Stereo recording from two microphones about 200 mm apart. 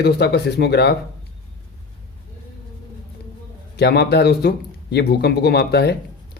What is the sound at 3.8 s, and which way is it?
Speech, 55° left (ahead or behind).